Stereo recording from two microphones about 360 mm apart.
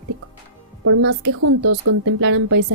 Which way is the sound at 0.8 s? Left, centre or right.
Right.